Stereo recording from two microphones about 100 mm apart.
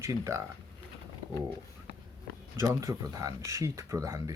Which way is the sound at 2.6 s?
30° right (ahead or behind).